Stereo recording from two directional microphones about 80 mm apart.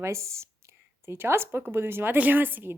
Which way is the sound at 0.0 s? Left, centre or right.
Right.